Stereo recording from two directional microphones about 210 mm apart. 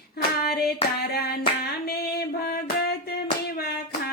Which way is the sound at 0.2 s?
45° left (ahead or behind).